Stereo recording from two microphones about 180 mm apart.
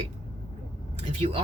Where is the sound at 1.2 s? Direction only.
30° right (ahead or behind).